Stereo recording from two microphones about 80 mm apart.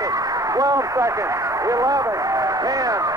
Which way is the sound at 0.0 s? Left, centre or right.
Right.